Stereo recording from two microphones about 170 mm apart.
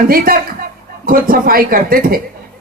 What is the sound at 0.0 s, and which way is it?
A man's voice, 60° right (ahead or behind).